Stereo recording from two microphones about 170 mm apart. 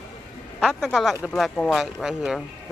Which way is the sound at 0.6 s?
Centre (ahead or behind).